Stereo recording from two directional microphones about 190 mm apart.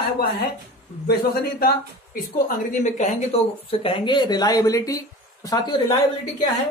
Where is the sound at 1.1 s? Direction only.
55° left (ahead or behind).